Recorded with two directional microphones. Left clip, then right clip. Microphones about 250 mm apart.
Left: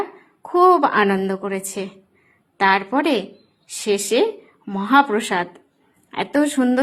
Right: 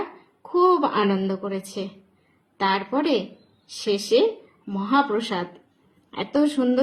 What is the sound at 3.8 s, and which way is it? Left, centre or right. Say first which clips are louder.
Speech: left 2 dB; left.